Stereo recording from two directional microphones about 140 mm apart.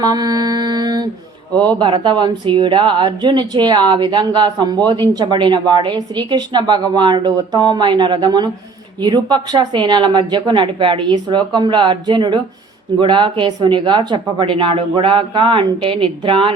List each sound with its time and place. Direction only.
0.0 s mantra: 30° right (ahead or behind)
1.8 s a woman's voice: 35° right (ahead or behind)